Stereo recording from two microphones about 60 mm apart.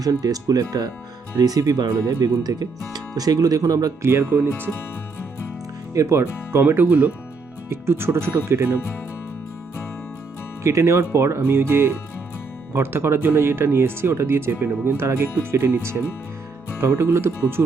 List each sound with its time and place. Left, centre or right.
0.0 s speech: right
4.0 s speech: right
4.5 s speech: left
5.9 s speech: right
6.6 s speech: right
7.7 s speech: right
10.6 s speech: right
14.5 s speech: right
14.9 s speech: right